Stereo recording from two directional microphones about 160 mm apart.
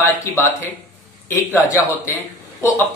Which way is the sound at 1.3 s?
15° left (ahead or behind).